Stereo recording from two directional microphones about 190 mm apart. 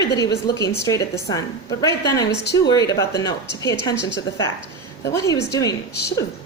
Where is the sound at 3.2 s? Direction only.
20° left (ahead or behind).